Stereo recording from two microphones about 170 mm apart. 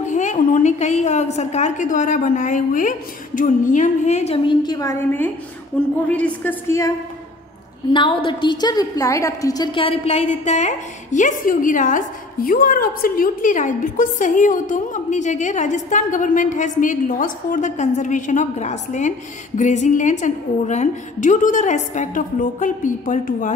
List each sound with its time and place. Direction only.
0.1 s a woman's voice: 45° left (ahead or behind)
4.6 s a woman's voice: 20° left (ahead or behind)
7.9 s a woman's voice: 30° left (ahead or behind); by 23.5 s 50° left (ahead or behind)